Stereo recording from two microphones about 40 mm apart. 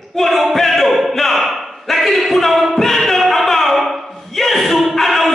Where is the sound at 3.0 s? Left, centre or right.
Centre.